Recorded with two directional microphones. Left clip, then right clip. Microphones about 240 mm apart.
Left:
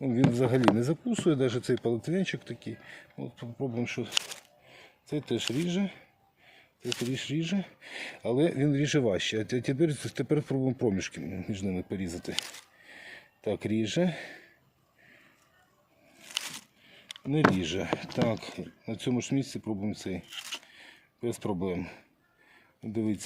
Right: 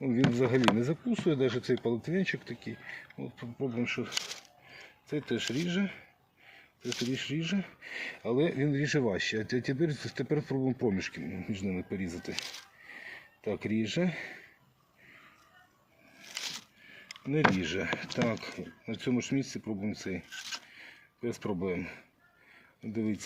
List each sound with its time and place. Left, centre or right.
0.0 s speech: left
6.8 s speech: left
17.6 s speech: left